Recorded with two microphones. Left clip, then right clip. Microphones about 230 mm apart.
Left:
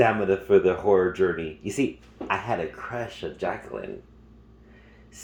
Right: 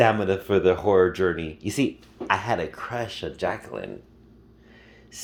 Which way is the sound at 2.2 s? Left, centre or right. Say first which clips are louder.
Right 3 dB; right.